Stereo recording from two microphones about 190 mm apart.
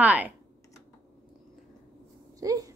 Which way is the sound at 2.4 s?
20° right (ahead or behind).